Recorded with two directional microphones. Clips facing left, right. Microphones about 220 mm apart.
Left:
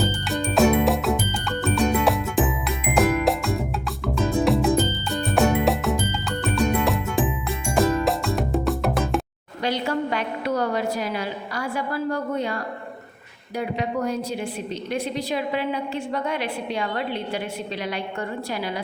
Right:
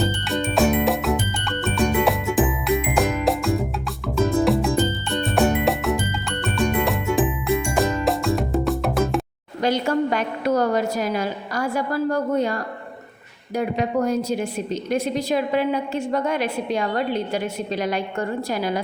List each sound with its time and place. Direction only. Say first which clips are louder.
0.0 s music: right 2 dB; centre (ahead or behind)
9.6 s a sound: right 4 dB; 45° right (ahead or behind)
13.6 s a woman's voice: right 4 dB; 45° right (ahead or behind)